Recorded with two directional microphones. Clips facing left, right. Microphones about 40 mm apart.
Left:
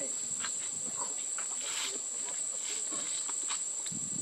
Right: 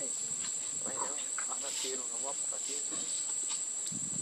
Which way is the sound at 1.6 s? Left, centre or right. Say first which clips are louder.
Left 1 dB; left.